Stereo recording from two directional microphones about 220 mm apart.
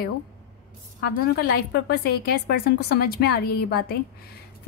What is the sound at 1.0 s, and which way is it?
A woman's voice, 45° left (ahead or behind).